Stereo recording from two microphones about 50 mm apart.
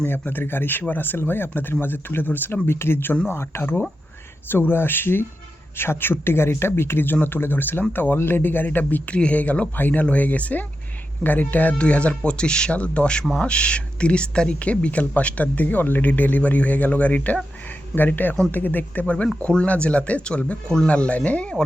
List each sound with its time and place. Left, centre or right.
0.1 s speech: left
2.6 s speech: left
3.2 s speech: left
11.7 s speech: left
12.7 s speech: left
19.0 s speech: left